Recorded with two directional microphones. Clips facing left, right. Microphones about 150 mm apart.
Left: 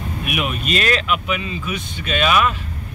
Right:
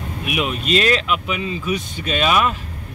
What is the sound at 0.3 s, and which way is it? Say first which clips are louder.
Speech: right 3 dB; 25° right (ahead or behind).